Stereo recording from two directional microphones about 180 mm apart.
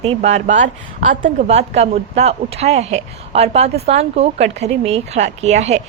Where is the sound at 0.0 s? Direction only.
35° right (ahead or behind).